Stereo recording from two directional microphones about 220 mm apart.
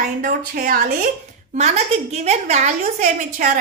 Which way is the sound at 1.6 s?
30° right (ahead or behind).